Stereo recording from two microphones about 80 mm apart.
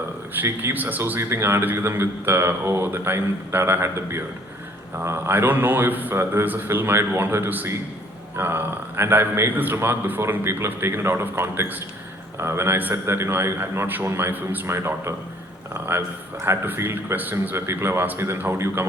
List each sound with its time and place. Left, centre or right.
0.3 s a man's voice: right
1.2 s a man's voice: right